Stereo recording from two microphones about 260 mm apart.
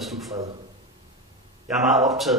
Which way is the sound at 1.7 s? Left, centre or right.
Centre.